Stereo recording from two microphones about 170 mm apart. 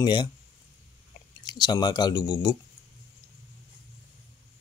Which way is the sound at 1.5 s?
25° left (ahead or behind).